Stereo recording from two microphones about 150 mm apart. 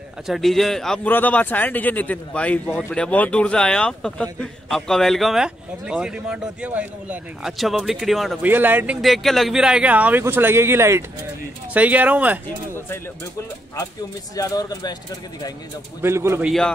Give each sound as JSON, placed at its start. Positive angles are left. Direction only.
{"t": 0.3, "sound": "a man's voice", "side_deg": 0}
{"t": 8.4, "sound": "speech", "side_deg": -10}
{"t": 9.0, "sound": "speech", "side_deg": 0}
{"t": 14.3, "sound": "speech", "side_deg": 25}
{"t": 16.0, "sound": "speech", "side_deg": -15}
{"t": 16.4, "sound": "a man's voice", "side_deg": 5}